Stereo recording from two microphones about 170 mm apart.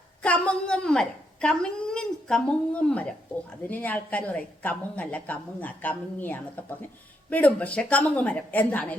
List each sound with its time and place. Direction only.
0.2 s a woman's voice: 5° left (ahead or behind)